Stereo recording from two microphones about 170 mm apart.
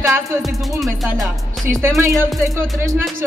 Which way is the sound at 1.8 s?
15° right (ahead or behind).